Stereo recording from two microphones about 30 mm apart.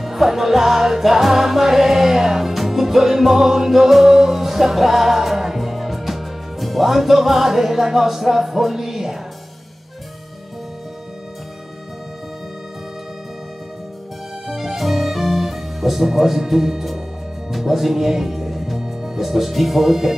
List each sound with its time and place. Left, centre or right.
0.0 s music: centre
14.5 s music: centre
18.8 s music: centre
19.2 s speech: centre